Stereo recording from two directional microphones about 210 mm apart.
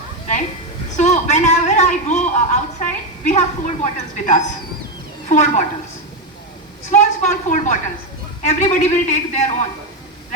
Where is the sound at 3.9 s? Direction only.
35° left (ahead or behind).